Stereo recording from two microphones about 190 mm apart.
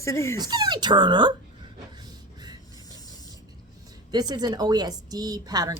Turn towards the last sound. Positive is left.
turn(degrees=-20)  # may be behind; listen again after turning